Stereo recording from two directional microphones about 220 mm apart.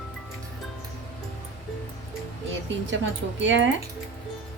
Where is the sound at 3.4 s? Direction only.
55° right (ahead or behind).